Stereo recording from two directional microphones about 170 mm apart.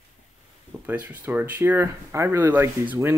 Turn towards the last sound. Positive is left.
turn(degrees=-10)  # may be behind; listen again after turning